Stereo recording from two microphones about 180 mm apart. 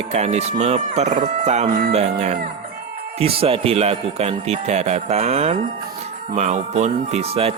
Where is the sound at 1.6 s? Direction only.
55° right (ahead or behind).